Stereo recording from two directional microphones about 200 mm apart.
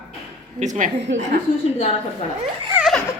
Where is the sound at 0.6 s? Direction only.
35° right (ahead or behind).